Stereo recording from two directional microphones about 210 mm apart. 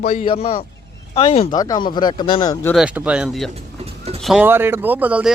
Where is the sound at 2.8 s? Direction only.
5° right (ahead or behind).